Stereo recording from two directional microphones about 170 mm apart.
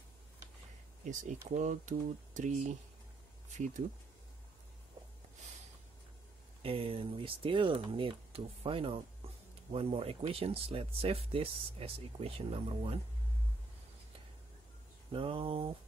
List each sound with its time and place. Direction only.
1.0 s speech: 45° right (ahead or behind)
6.6 s speech: 30° right (ahead or behind)
15.1 s speech: 35° right (ahead or behind)